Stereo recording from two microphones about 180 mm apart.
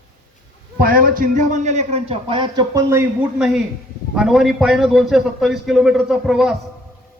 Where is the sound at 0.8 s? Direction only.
55° right (ahead or behind); by 3.1 s 15° right (ahead or behind).